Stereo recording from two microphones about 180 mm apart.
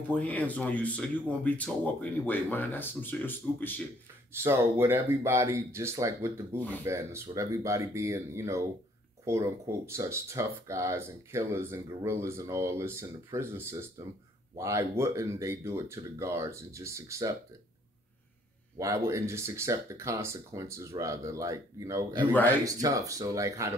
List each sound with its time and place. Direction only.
0.1 s speech: 10° left (ahead or behind)
4.3 s speech: 15° right (ahead or behind)
18.8 s speech: 15° right (ahead or behind)